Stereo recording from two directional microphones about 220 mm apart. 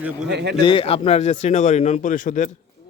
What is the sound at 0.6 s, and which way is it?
Speech, 25° left (ahead or behind).